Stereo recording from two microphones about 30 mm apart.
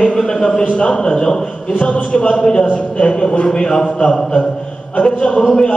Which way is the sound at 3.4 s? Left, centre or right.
Left.